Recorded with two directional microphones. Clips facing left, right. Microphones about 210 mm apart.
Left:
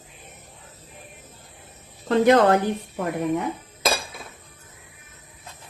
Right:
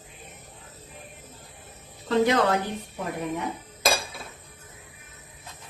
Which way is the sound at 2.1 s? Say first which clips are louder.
Left 5 dB; 55° left (ahead or behind).